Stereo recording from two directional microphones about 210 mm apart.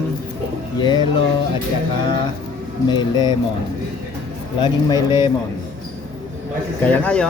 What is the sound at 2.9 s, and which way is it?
Speech, 20° left (ahead or behind).